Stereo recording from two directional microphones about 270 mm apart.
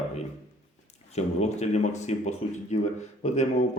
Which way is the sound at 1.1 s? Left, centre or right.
Left.